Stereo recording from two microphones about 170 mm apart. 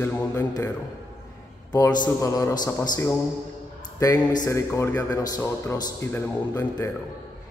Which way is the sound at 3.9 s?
20° left (ahead or behind).